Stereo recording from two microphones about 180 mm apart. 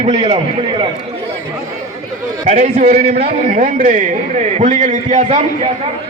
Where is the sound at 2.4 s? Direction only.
40° right (ahead or behind).